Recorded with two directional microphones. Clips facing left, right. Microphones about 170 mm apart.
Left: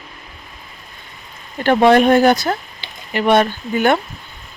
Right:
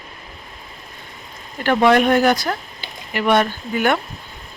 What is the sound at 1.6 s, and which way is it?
Speech, 30° left (ahead or behind).